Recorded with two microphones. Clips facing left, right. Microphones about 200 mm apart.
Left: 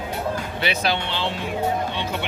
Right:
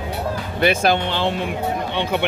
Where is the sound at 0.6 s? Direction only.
50° right (ahead or behind).